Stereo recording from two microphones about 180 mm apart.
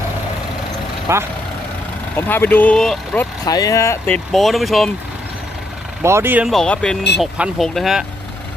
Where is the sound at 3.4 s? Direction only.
20° left (ahead or behind).